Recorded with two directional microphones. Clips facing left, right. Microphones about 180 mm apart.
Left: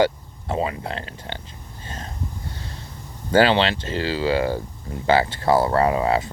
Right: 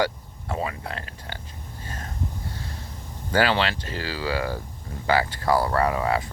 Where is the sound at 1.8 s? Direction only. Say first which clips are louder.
Left 2 dB; 25° left (ahead or behind).